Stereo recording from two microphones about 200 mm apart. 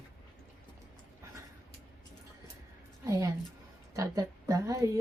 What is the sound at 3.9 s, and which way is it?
Speech, 15° right (ahead or behind).